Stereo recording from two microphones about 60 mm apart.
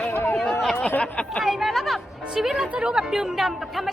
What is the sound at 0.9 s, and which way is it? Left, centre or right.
Speech, left.